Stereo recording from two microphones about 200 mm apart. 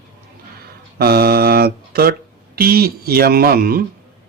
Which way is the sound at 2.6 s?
50° right (ahead or behind).